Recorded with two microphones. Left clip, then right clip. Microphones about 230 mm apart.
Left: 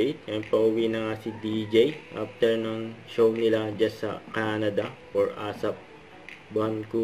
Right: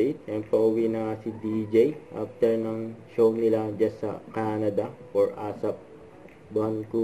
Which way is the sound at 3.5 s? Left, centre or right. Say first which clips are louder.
Even; left.